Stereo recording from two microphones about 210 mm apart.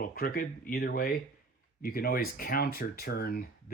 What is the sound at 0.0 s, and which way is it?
Speech, 45° left (ahead or behind).